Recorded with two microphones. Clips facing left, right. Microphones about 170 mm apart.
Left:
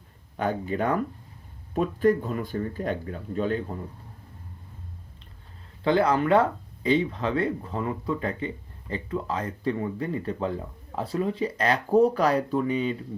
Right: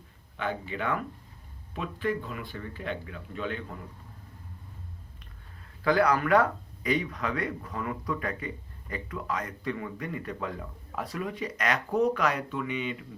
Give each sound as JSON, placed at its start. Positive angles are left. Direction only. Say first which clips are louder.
{"t": 0.3, "sound": "speech", "louder": "left 6 dB", "side_deg": 40}
{"t": 5.8, "sound": "speech", "louder": "left 2 dB", "side_deg": 25}